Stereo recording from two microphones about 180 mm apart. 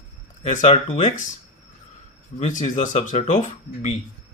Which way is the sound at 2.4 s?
45° left (ahead or behind).